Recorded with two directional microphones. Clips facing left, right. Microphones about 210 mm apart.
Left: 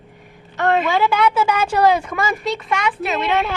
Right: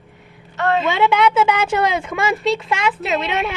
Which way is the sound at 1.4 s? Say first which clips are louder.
Left 2 dB; 25° right (ahead or behind).